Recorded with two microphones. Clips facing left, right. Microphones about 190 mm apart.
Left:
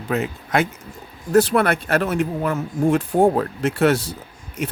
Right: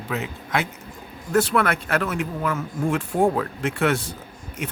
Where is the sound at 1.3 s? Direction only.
35° left (ahead or behind).